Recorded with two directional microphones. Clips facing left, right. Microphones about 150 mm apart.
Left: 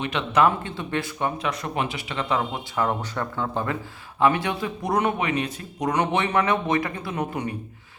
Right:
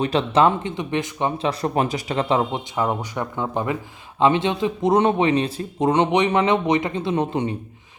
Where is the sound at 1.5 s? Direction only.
35° right (ahead or behind).